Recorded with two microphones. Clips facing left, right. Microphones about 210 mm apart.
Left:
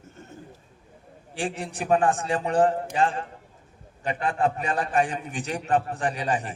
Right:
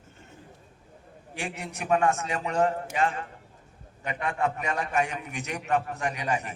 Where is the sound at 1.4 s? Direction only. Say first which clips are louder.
Left 5 dB; 30° left (ahead or behind).